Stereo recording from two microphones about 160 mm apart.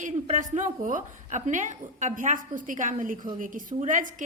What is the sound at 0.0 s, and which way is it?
A woman's voice, 50° right (ahead or behind).